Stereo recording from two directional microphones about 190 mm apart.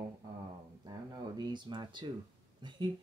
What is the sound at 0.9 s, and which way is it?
Speech, 20° right (ahead or behind).